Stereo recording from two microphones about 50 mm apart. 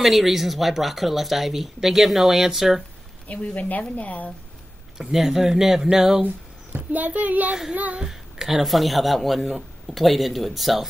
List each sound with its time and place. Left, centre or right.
0.0 s speech: centre
3.3 s speech: left
4.9 s speech: centre
6.2 s a child's voice: right
8.0 s speech: centre